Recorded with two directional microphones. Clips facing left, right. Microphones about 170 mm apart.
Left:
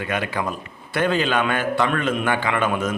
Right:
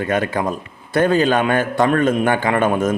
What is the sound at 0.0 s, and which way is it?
A man's voice, 45° right (ahead or behind).